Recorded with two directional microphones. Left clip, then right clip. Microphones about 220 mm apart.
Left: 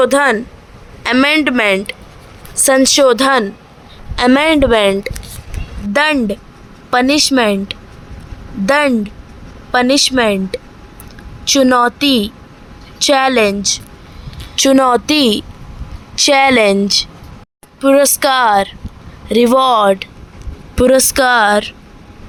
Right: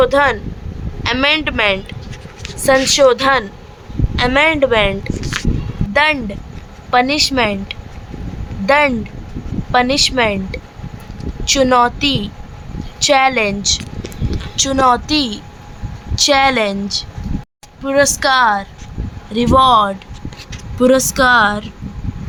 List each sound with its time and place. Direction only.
0.0 s a woman's voice: 25° left (ahead or behind)
14.5 s a woman's voice: 35° left (ahead or behind)